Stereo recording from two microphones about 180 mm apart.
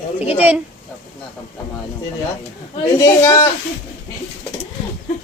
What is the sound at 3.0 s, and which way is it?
Speech, 20° left (ahead or behind).